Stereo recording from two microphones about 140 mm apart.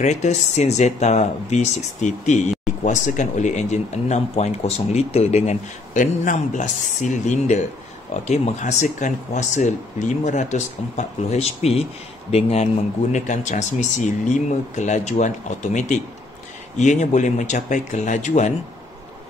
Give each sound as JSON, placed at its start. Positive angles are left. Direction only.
{"t": 0.0, "sound": "speech", "side_deg": 55}
{"t": 13.1, "sound": "speech", "side_deg": 60}